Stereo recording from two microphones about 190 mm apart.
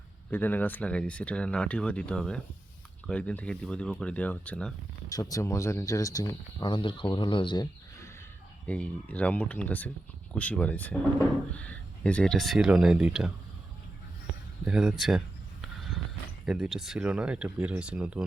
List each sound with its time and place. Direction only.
0.3 s speech: 10° left (ahead or behind)
5.0 s speech: 20° left (ahead or behind)
8.6 s speech: 5° left (ahead or behind)
14.6 s speech: 5° right (ahead or behind)
16.5 s speech: centre (ahead or behind)